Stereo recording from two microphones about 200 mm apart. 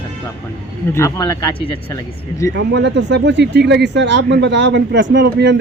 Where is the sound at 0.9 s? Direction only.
15° left (ahead or behind).